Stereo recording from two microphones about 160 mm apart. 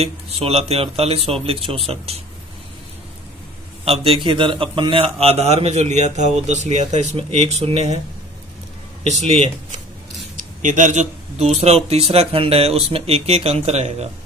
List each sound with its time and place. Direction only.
0.0 s a man's voice: 40° right (ahead or behind)
3.8 s a man's voice: 35° right (ahead or behind)
9.0 s a man's voice: 40° right (ahead or behind)
10.3 s a sound: 55° right (ahead or behind)
11.6 s a man's voice: 40° right (ahead or behind)